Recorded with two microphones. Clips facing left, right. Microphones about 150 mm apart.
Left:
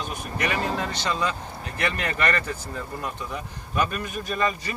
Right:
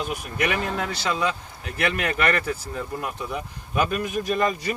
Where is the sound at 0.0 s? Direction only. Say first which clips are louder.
Right 3 dB; 10° right (ahead or behind).